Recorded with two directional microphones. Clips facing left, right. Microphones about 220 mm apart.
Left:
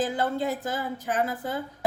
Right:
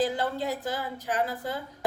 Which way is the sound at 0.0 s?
50° left (ahead or behind).